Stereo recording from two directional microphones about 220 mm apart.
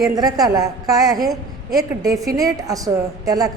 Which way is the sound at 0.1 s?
15° right (ahead or behind).